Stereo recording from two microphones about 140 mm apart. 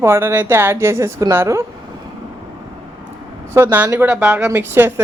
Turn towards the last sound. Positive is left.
turn(degrees=-15)  # may be behind; listen again after turning